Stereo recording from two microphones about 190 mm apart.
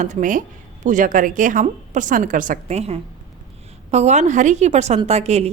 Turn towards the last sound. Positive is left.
turn(degrees=-35)  # may be behind; listen again after turning